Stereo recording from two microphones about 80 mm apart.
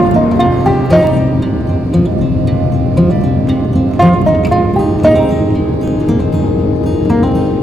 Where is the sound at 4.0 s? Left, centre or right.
Centre.